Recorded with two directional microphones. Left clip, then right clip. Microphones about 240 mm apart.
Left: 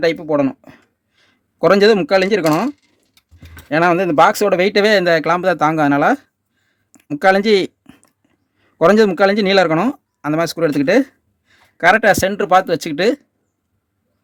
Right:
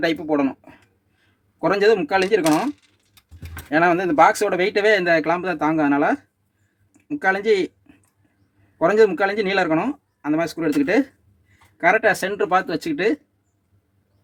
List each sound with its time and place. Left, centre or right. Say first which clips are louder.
0.0 s speech: left 5 dB; left